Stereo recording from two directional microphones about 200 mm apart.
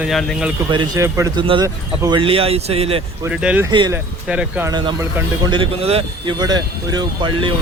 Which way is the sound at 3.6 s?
20° right (ahead or behind).